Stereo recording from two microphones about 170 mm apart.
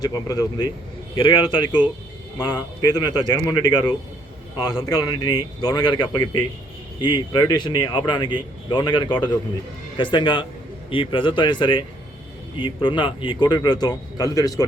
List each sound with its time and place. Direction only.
0.0 s speech: 25° left (ahead or behind)